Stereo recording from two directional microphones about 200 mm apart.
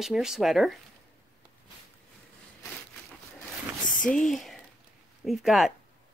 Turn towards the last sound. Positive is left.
turn(degrees=0)  # may be behind; listen again after turning